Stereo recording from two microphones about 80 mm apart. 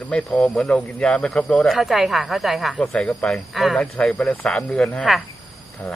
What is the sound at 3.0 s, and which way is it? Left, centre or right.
Speech, centre.